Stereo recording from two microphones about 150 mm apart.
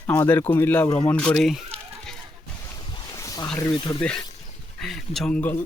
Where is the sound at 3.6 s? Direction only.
30° left (ahead or behind).